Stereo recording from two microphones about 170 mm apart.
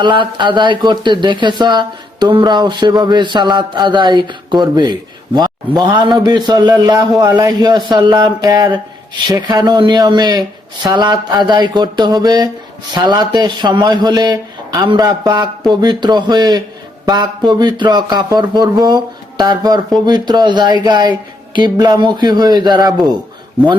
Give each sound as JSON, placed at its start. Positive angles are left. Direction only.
{"t": 0.0, "sound": "a man's voice", "side_deg": -25}